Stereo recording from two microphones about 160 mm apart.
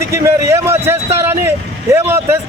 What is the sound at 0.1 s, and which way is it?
Vehicle, 15° right (ahead or behind).